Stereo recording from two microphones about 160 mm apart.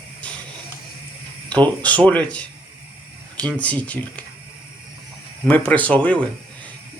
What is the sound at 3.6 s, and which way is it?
Speech, 10° left (ahead or behind).